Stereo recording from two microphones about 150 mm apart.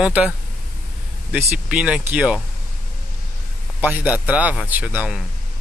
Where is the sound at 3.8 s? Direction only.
10° right (ahead or behind).